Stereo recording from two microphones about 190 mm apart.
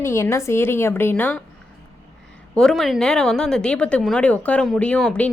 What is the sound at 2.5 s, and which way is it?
A woman's voice, centre (ahead or behind).